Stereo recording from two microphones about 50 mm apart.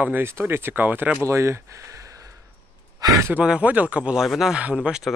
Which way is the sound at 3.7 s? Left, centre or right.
Right.